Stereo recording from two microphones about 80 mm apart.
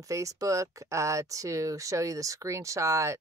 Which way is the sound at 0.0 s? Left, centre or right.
Right.